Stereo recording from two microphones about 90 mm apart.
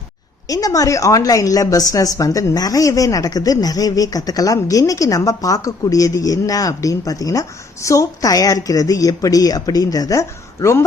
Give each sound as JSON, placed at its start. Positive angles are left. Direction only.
{"t": 0.4, "sound": "a woman's voice", "side_deg": 40}